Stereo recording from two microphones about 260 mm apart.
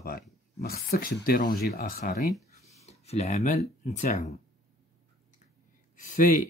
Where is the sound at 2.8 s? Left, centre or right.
Left.